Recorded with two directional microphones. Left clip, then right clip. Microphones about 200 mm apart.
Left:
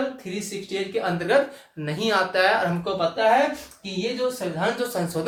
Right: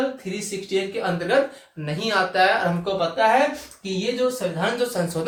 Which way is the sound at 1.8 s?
25° left (ahead or behind).